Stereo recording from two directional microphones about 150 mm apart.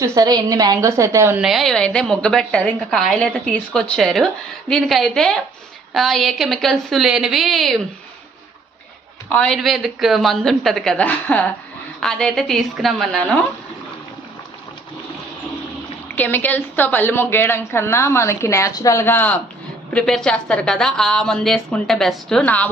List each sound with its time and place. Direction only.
0.0 s a woman's voice: 25° right (ahead or behind)
1.4 s a woman's voice: centre (ahead or behind)
9.3 s a woman's voice: 5° left (ahead or behind)
16.1 s a woman's voice: 10° left (ahead or behind)